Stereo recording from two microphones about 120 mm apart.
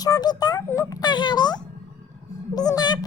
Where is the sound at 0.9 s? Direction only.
35° left (ahead or behind).